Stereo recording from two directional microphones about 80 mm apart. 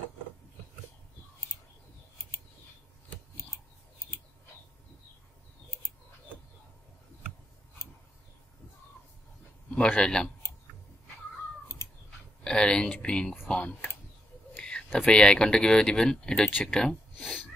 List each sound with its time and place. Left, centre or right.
3.3 s scissors: left
9.8 s speech: centre
12.4 s speech: centre